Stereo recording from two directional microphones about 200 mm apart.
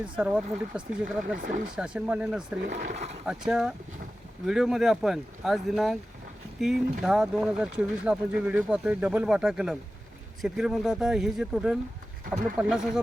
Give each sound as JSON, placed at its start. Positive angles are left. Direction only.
{"t": 0.2, "sound": "speech", "side_deg": -5}
{"t": 1.4, "sound": "speech", "side_deg": -40}
{"t": 1.7, "sound": "speech", "side_deg": -5}
{"t": 2.8, "sound": "speech", "side_deg": -35}
{"t": 3.2, "sound": "speech", "side_deg": -5}
{"t": 7.0, "sound": "speech", "side_deg": -5}